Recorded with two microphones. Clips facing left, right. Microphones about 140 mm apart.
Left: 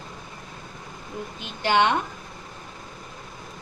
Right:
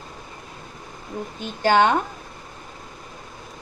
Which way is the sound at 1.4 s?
45° right (ahead or behind).